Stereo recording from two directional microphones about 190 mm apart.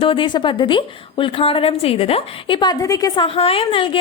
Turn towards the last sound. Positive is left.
turn(degrees=30)  # may be behind; listen again after turning